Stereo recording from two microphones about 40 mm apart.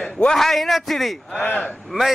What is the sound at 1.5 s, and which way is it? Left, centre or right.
Speech, left.